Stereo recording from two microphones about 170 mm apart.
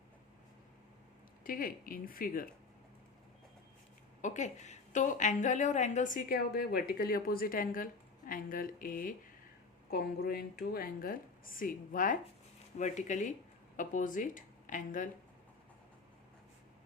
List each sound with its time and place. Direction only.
1.5 s speech: 55° left (ahead or behind)
4.2 s a woman's voice: 45° left (ahead or behind)
9.9 s a woman's voice: 65° left (ahead or behind); by 15.1 s 50° left (ahead or behind)